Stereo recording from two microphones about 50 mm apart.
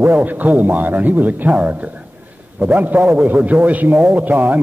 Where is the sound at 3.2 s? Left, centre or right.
Right.